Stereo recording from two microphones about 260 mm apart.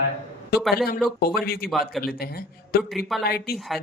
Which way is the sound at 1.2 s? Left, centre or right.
Left.